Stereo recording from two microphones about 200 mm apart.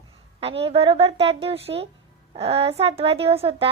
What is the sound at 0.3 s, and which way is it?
A woman's voice, 30° right (ahead or behind).